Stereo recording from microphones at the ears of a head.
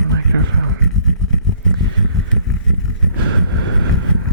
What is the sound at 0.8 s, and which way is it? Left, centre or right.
Vehicle, right.